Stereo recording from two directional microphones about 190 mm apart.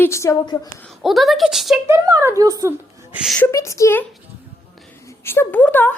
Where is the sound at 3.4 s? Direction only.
15° left (ahead or behind).